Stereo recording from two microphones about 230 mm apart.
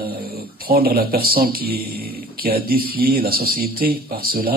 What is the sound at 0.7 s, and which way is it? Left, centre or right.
Speech, right.